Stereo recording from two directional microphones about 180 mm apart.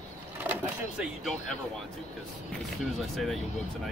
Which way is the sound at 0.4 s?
5° right (ahead or behind).